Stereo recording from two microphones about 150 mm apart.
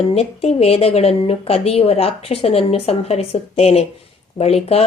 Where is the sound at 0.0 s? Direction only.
45° left (ahead or behind).